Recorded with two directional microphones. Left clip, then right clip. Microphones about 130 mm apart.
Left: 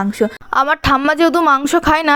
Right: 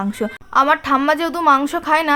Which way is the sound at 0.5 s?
70° left (ahead or behind).